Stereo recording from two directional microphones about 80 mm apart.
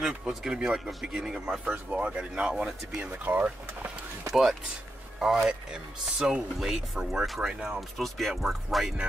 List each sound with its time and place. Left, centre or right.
0.0 s speech: centre
3.1 s speech: right
4.3 s speech: centre